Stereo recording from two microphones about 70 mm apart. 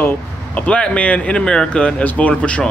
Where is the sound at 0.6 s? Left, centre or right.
Centre.